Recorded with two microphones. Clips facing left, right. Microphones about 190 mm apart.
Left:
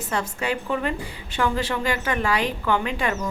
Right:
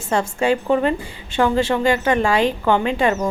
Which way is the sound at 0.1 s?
30° right (ahead or behind).